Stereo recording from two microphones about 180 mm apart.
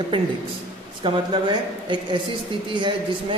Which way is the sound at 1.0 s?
25° right (ahead or behind).